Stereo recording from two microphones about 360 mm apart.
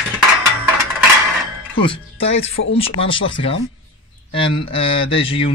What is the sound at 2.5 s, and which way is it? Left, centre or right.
Speech, left.